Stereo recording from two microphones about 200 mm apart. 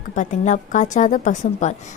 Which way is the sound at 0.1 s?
40° left (ahead or behind).